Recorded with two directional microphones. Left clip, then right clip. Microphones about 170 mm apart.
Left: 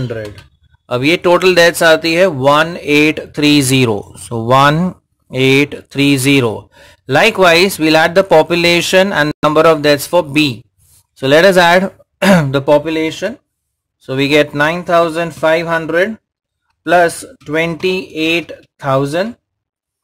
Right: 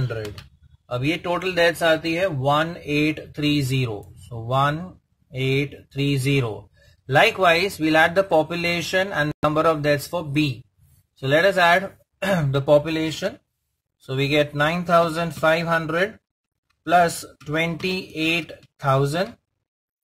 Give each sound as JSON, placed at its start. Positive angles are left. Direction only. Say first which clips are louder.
{"t": 0.9, "sound": "speech", "louder": "left 13 dB", "side_deg": 50}
{"t": 3.0, "sound": "speech", "louder": "left 10 dB", "side_deg": 40}